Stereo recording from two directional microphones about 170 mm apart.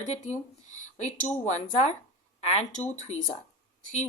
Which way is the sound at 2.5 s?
40° left (ahead or behind).